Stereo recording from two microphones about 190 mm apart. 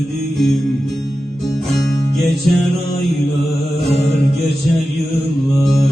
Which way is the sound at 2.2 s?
Centre (ahead or behind).